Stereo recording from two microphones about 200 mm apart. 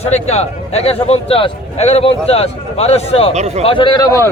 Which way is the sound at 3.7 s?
25° left (ahead or behind).